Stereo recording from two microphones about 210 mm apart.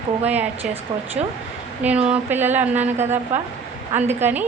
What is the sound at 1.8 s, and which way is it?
A woman's voice, 5° right (ahead or behind).